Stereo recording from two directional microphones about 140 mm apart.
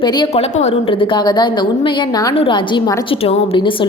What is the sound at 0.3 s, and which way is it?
A woman's voice, 50° left (ahead or behind).